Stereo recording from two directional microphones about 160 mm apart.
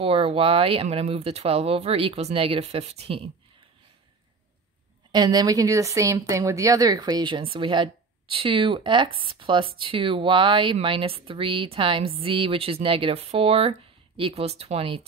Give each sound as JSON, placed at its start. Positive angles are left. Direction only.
{"t": 0.0, "sound": "speech", "side_deg": -35}
{"t": 5.1, "sound": "speech", "side_deg": -25}